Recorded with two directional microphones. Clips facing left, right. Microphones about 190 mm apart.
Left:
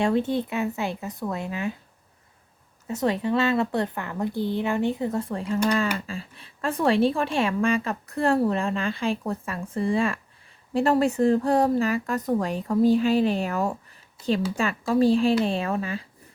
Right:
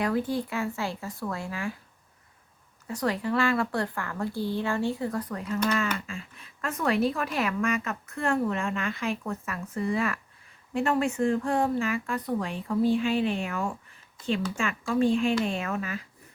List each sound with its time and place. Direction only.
0.0 s a woman's voice: 25° left (ahead or behind)
2.8 s a woman's voice: 25° left (ahead or behind)